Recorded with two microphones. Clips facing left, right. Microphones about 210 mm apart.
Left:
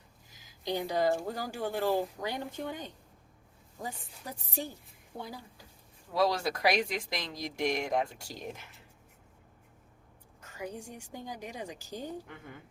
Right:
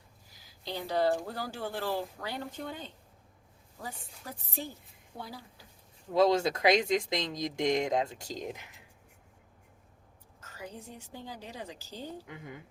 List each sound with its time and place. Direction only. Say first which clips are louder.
0.3 s a woman's voice: left 5 dB; 15° left (ahead or behind)
6.1 s speech: right 4 dB; 20° right (ahead or behind)
10.4 s a woman's voice: left 4 dB; 15° left (ahead or behind)